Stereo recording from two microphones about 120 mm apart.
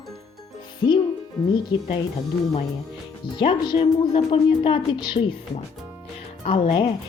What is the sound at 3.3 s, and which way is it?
A woman's voice, 40° left (ahead or behind).